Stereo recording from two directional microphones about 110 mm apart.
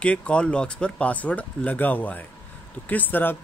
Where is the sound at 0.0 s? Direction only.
10° left (ahead or behind).